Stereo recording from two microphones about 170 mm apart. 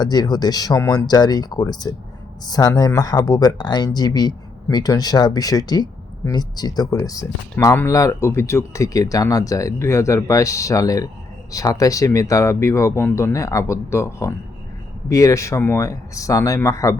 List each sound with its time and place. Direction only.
0.0 s speech: 25° left (ahead or behind)